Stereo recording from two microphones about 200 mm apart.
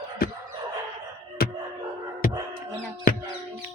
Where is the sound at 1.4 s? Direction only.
50° left (ahead or behind).